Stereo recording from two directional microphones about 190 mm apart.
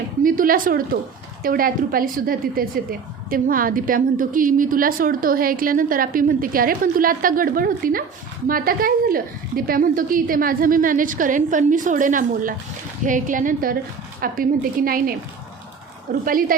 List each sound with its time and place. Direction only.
0.2 s a woman's voice: 45° right (ahead or behind)
16.2 s a woman's voice: 50° right (ahead or behind)